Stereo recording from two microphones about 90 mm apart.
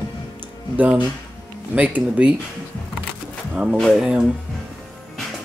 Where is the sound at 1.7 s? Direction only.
15° right (ahead or behind).